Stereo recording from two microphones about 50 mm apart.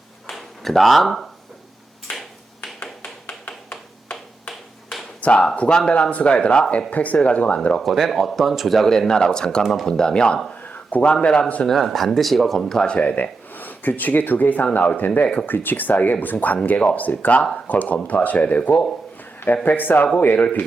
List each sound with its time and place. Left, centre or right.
0.3 s a sound: centre
2.1 s finger snapping: left
3.2 s a sound: left
5.2 s speech: left
7.8 s speech: centre
8.9 s speech: centre
10.6 s a sound: left
11.0 s speech: centre
11.6 s speech: centre
13.0 s speech: left
13.5 s speech: left